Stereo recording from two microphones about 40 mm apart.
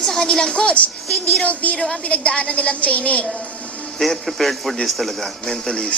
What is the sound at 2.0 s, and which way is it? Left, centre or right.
Speech, left.